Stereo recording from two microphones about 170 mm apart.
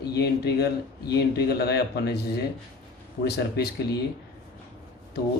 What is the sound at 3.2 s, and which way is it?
Speech, 70° left (ahead or behind).